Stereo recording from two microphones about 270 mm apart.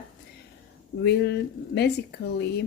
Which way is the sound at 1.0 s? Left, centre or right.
Left.